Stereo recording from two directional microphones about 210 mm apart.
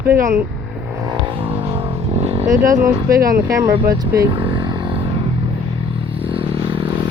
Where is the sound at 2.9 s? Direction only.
15° right (ahead or behind).